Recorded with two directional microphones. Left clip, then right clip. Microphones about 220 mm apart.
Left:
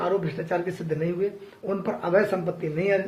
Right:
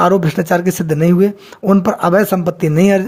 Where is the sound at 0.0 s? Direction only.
50° right (ahead or behind).